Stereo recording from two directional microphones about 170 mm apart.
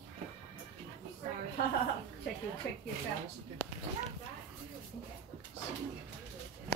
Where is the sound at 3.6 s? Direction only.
10° left (ahead or behind).